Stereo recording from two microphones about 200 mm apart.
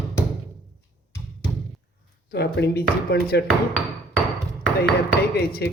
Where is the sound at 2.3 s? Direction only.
55° left (ahead or behind).